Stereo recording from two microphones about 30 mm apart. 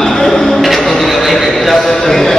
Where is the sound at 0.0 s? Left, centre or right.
Centre.